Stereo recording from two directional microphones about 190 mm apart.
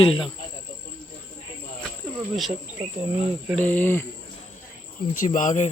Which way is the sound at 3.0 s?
35° right (ahead or behind).